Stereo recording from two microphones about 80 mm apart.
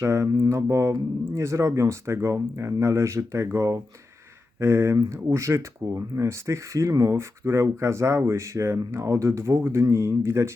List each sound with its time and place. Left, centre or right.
0.0 s speech: right